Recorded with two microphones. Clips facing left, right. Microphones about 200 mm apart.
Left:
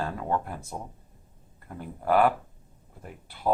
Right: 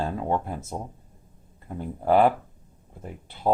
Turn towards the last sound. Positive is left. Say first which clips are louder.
# right 3 dB
turn(degrees=-25)  # may be behind; listen again after turning